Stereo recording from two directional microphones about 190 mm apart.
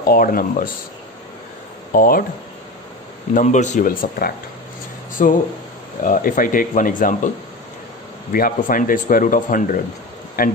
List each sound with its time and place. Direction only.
0.0 s speech: 50° left (ahead or behind)
1.9 s speech: 50° left (ahead or behind)
3.3 s speech: 40° left (ahead or behind)
8.3 s speech: 50° left (ahead or behind)